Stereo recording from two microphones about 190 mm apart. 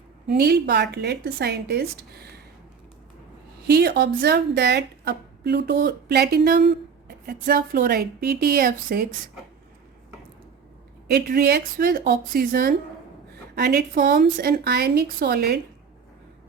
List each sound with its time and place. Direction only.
0.3 s a woman's voice: 55° right (ahead or behind)
3.7 s a woman's voice: 55° right (ahead or behind)
11.1 s a woman's voice: 55° right (ahead or behind)